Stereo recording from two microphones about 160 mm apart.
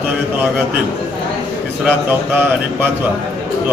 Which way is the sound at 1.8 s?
10° right (ahead or behind).